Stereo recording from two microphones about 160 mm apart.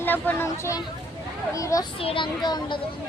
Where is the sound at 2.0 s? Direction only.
35° left (ahead or behind).